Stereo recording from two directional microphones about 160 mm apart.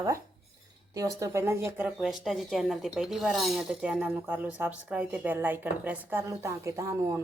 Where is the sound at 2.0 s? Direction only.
Centre (ahead or behind).